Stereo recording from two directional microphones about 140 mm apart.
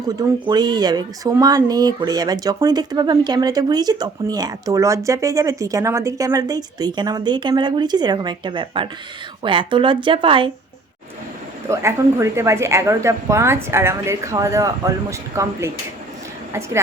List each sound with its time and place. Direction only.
0.1 s speech: 30° right (ahead or behind)
11.7 s a woman's voice: 20° right (ahead or behind)